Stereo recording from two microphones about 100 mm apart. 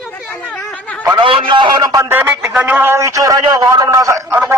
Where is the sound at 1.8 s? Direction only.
40° right (ahead or behind).